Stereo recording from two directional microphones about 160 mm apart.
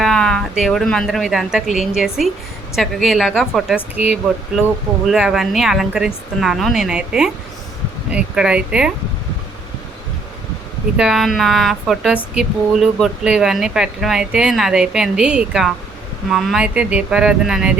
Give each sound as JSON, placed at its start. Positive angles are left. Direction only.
{"t": 0.0, "sound": "speech", "side_deg": 5}
{"t": 3.9, "sound": "speech", "side_deg": 40}
{"t": 5.0, "sound": "speech", "side_deg": -5}
{"t": 10.9, "sound": "speech", "side_deg": -5}